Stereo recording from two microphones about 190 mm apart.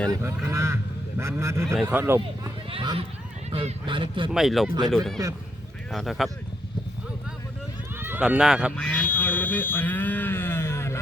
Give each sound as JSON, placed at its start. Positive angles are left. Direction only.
{"t": 0.1, "sound": "speech", "side_deg": -15}
{"t": 1.6, "sound": "speech", "side_deg": -5}
{"t": 2.6, "sound": "speech", "side_deg": -30}
{"t": 4.3, "sound": "speech", "side_deg": 0}
{"t": 7.9, "sound": "speech", "side_deg": -10}
{"t": 8.7, "sound": "cattle", "side_deg": 5}